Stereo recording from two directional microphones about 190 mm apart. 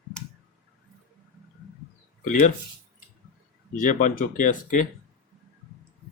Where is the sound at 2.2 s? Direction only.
40° left (ahead or behind).